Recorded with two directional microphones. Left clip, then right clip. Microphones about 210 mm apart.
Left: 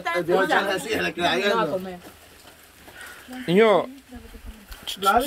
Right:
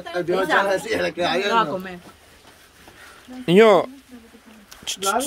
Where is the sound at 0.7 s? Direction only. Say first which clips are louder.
Right 3 dB; 20° right (ahead or behind).